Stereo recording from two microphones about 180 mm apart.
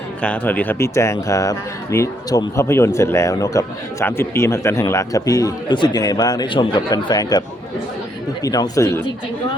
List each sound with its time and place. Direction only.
0.2 s a man's voice: 10° left (ahead or behind)